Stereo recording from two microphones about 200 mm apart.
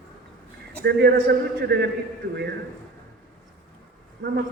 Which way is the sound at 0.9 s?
55° right (ahead or behind).